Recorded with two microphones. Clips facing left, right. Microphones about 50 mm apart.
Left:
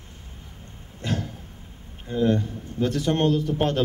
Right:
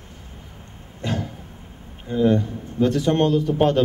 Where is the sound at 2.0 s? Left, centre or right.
Centre.